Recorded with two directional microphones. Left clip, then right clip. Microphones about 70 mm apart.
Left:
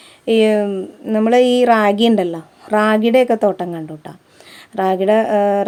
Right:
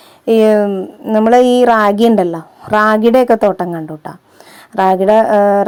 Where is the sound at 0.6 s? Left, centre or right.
Right.